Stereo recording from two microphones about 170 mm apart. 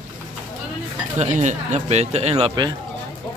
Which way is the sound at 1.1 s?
45° right (ahead or behind).